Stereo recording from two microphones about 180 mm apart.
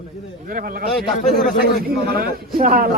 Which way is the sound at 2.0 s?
55° right (ahead or behind).